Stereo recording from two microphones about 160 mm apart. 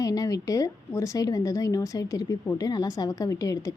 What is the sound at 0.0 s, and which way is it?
Speech, 20° left (ahead or behind).